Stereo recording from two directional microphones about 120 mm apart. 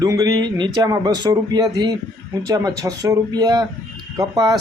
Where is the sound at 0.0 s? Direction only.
30° right (ahead or behind).